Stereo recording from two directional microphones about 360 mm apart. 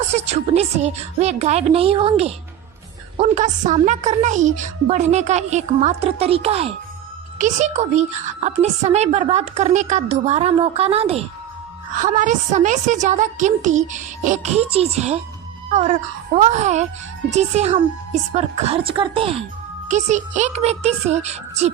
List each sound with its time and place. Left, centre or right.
0.1 s a woman's voice: centre